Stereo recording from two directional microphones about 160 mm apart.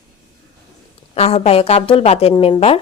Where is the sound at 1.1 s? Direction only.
40° left (ahead or behind).